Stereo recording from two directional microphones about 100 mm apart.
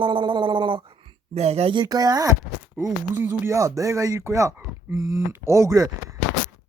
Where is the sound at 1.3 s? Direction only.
90° right.